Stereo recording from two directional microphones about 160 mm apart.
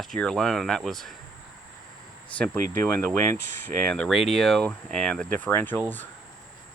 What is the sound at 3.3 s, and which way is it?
Speech, 90° left.